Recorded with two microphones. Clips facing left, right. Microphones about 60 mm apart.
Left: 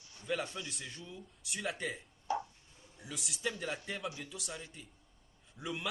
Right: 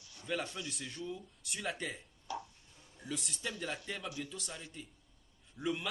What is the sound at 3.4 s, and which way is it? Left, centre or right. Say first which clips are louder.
Speech: left 3 dB; left.